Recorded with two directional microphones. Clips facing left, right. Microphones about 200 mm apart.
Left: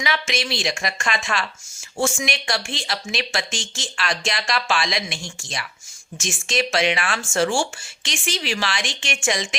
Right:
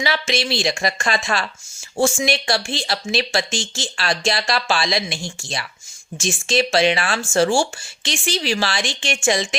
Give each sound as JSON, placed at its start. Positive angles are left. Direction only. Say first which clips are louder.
{"t": 0.0, "sound": "speech", "louder": "right 3 dB", "side_deg": -35}